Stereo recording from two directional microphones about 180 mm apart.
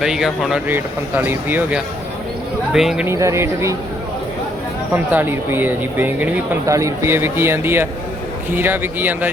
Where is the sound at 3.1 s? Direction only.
15° right (ahead or behind).